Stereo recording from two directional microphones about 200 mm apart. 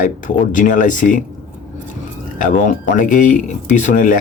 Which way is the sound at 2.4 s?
40° left (ahead or behind).